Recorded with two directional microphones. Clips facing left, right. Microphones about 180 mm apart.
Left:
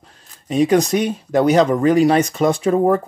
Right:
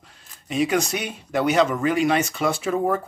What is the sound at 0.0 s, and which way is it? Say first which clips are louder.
Speech: left 3 dB; 35° left (ahead or behind).